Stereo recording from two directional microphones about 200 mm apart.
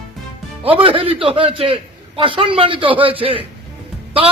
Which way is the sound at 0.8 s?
25° right (ahead or behind).